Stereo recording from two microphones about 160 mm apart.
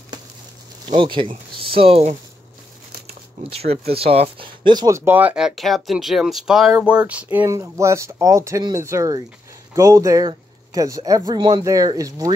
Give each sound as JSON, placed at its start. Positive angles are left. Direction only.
{"t": 0.8, "sound": "speech", "side_deg": -30}
{"t": 3.4, "sound": "speech", "side_deg": -40}